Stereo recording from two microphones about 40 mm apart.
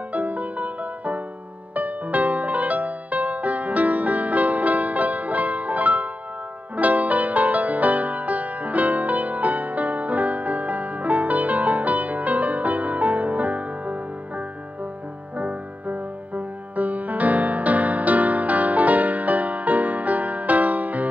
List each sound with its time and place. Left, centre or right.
0.1 s music: right
15.3 s music: right